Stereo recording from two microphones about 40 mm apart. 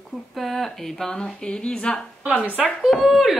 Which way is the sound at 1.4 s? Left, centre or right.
Centre.